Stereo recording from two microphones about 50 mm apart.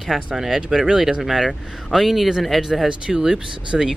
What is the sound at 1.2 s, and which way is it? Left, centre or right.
Speech, centre.